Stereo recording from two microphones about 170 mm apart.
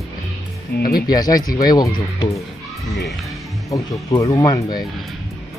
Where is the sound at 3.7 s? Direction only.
20° left (ahead or behind).